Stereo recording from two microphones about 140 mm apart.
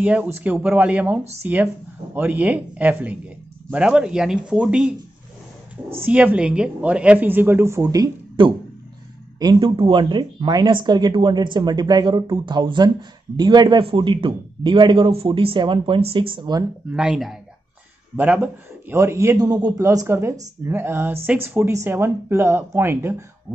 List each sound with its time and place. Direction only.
0.0 s speech: 10° right (ahead or behind)
6.0 s speech: 10° right (ahead or behind); by 16.6 s 35° right (ahead or behind)
16.9 s a man's voice: 5° right (ahead or behind)